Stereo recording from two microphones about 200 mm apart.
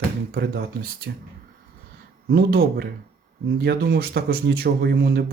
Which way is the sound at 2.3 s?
50° right (ahead or behind).